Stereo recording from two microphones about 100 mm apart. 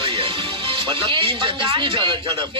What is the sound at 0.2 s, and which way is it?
A woman's voice, 65° right (ahead or behind).